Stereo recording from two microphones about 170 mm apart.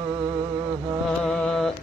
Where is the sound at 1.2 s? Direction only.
5° left (ahead or behind).